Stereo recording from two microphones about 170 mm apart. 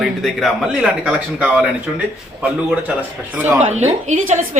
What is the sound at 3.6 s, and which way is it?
Speech, 40° right (ahead or behind).